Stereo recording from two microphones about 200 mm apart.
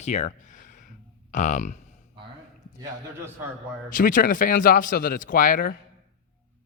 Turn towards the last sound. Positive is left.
turn(degrees=40)  # may be behind; listen again after turning